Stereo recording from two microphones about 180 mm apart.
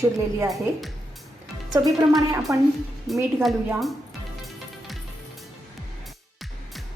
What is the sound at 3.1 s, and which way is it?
Speech, centre (ahead or behind).